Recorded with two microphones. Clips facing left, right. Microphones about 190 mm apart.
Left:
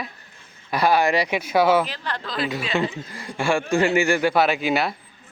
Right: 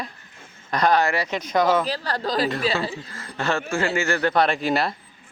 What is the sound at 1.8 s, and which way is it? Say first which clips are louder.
Speech: right 5 dB; 40° right (ahead or behind).